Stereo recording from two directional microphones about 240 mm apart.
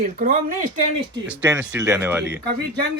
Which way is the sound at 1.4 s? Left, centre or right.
Centre.